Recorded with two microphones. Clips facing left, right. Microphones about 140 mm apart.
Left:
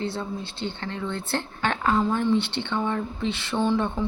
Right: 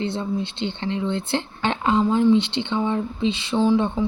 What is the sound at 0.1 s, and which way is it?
Speech, 20° right (ahead or behind).